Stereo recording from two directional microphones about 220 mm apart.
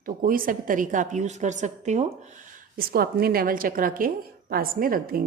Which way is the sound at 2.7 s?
40° right (ahead or behind).